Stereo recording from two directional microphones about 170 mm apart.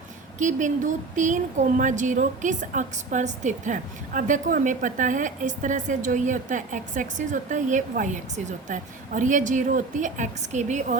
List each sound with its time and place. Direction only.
0.3 s speech: 50° right (ahead or behind)